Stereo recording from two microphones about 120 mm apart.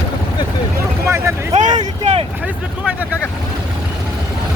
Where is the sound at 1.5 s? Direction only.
90° right.